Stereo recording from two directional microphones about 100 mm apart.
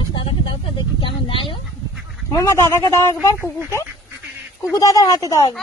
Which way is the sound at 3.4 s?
20° right (ahead or behind).